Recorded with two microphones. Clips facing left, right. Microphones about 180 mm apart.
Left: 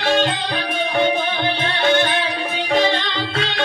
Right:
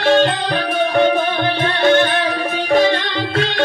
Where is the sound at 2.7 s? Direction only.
50° right (ahead or behind).